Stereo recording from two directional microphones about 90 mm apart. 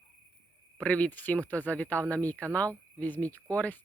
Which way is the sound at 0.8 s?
15° left (ahead or behind).